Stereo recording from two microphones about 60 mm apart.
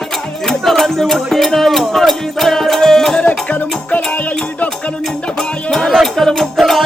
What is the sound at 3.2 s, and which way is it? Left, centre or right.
Music, left.